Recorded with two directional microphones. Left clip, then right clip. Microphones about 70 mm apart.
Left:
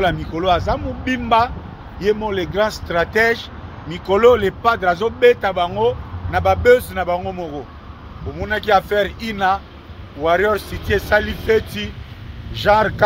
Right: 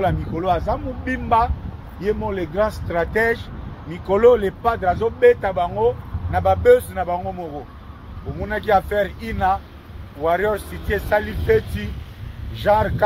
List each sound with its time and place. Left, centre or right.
0.0 s speech: left
3.9 s speech: left
4.6 s speech: left
6.3 s speech: left
6.9 s speech: left
8.5 s speech: left
10.2 s speech: left
12.5 s speech: left